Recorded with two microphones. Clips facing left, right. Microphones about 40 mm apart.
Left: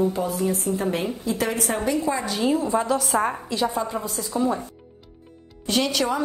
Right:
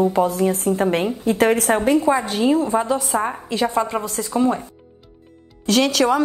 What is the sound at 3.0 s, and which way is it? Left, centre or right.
Speech, centre.